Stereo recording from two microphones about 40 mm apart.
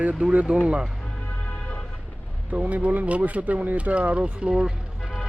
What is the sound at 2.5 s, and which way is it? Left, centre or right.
Speech, right.